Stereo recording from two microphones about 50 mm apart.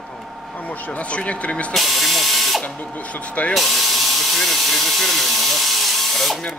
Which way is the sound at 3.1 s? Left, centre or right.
Left.